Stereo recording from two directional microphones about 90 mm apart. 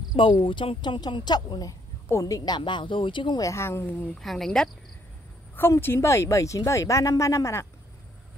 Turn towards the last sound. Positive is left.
turn(degrees=35)  # may be behind; listen again after turning